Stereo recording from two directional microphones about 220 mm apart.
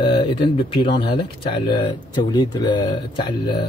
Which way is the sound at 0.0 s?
25° left (ahead or behind).